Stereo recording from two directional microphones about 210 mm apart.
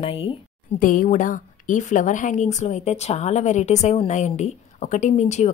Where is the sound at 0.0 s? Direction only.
25° left (ahead or behind).